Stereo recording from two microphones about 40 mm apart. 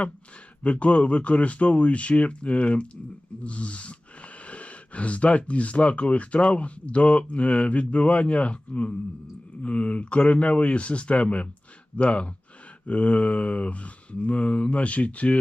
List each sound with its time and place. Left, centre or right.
0.6 s speech: left